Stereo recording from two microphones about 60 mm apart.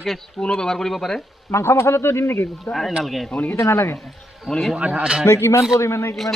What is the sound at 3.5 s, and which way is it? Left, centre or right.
Speech, left.